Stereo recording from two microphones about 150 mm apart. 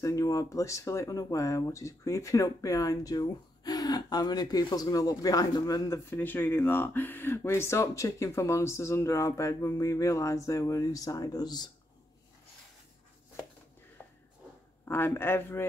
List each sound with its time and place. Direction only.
0.0 s speech: 20° left (ahead or behind)
14.0 s a sound: 10° left (ahead or behind)
14.9 s speech: 15° left (ahead or behind)